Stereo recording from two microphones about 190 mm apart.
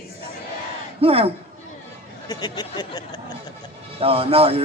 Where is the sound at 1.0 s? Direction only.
30° right (ahead or behind).